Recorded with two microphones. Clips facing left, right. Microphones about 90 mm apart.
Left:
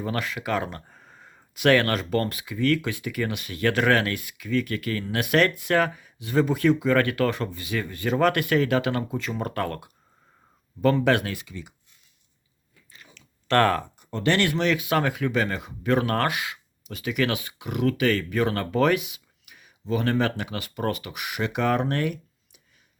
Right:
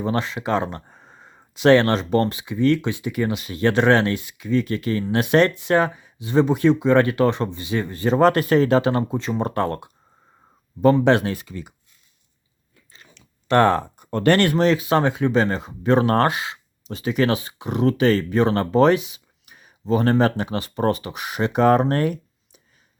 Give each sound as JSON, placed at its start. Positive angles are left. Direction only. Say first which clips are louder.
{"t": 0.0, "sound": "speech", "louder": "right 5 dB", "side_deg": -25}
{"t": 12.9, "sound": "a sound", "louder": "even", "side_deg": -25}
{"t": 13.8, "sound": "speech", "louder": "right 6 dB", "side_deg": -50}